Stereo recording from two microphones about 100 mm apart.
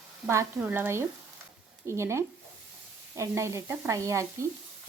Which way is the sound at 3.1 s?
30° right (ahead or behind).